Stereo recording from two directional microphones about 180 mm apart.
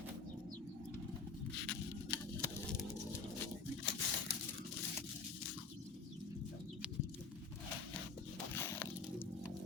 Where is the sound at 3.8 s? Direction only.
70° left (ahead or behind).